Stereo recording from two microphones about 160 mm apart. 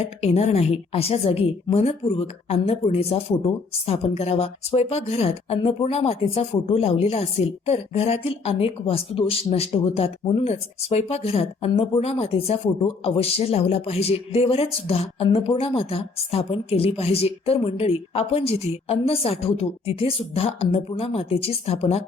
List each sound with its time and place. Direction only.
0.0 s a woman's voice: 40° left (ahead or behind)